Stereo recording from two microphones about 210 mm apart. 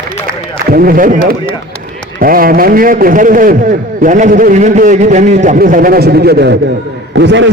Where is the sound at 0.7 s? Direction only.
45° right (ahead or behind).